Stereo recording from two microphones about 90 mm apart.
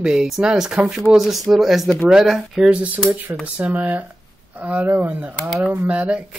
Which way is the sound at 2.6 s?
15° right (ahead or behind).